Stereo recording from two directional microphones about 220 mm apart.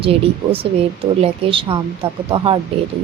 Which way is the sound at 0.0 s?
25° right (ahead or behind).